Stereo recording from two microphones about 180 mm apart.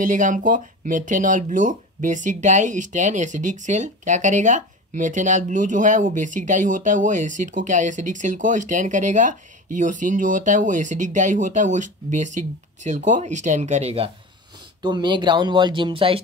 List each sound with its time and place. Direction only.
0.0 s speech: 45° right (ahead or behind); by 16.2 s 30° right (ahead or behind)